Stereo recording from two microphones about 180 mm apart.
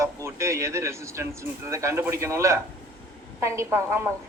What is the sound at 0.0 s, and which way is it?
A man's voice, 15° right (ahead or behind).